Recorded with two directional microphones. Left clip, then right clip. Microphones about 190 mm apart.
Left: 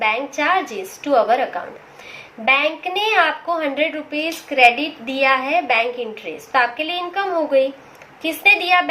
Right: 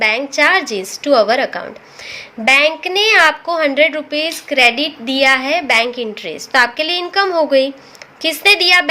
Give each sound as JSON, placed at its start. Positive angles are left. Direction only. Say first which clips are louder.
{"t": 0.0, "sound": "a woman's voice", "louder": "right 6 dB", "side_deg": -55}